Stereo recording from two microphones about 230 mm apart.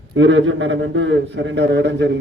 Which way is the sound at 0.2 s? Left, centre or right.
Right.